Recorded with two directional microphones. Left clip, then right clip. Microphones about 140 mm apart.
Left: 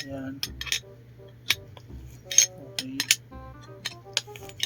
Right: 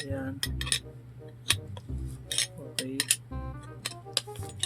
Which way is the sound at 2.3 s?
15° right (ahead or behind).